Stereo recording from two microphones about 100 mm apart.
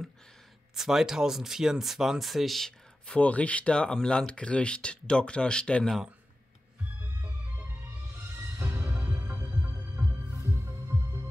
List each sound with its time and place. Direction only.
0.7 s speech: 5° right (ahead or behind)
7.2 s music: 20° right (ahead or behind)